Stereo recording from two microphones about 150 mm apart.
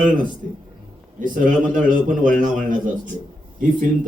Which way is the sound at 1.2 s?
65° right (ahead or behind).